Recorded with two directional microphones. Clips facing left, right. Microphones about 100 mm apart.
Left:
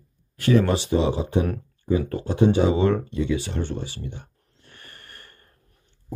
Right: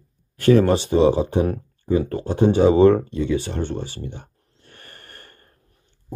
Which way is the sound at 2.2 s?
40° right (ahead or behind).